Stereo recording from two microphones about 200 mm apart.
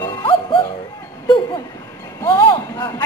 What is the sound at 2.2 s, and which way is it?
Speech, 20° left (ahead or behind).